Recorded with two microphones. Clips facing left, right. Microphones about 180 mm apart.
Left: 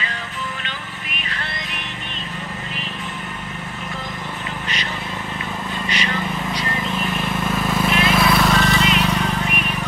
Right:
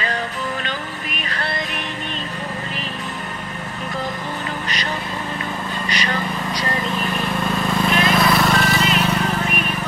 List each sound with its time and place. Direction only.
0.7 s music: 40° right (ahead or behind)
5.9 s vehicle: 40° right (ahead or behind)
7.5 s vehicle: 5° left (ahead or behind)